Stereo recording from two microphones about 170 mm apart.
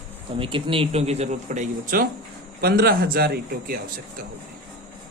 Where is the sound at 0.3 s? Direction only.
30° right (ahead or behind); by 2.0 s 50° right (ahead or behind).